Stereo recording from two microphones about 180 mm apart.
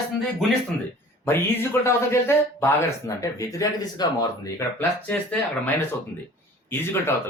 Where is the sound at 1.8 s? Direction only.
15° left (ahead or behind).